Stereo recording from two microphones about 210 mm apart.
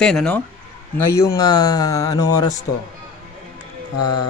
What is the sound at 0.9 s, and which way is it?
Speech, 15° left (ahead or behind).